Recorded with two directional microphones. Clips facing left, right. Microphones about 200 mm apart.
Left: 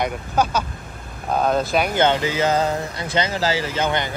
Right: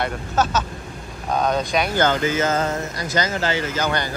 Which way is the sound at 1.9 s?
25° left (ahead or behind).